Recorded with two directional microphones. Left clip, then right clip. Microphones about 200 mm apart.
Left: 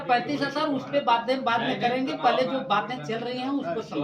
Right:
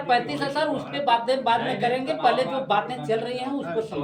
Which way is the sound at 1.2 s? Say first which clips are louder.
Right 3 dB; 20° right (ahead or behind).